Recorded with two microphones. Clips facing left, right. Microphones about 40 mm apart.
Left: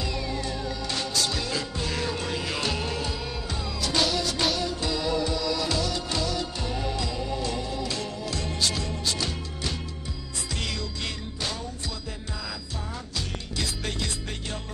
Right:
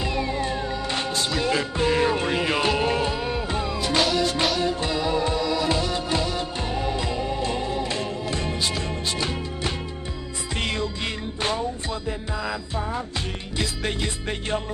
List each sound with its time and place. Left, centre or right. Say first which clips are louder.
0.0 s music: right 5 dB; right
12.4 s music: right 8 dB; right